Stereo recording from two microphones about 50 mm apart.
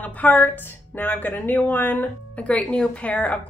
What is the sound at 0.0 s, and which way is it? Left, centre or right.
A woman's voice, left.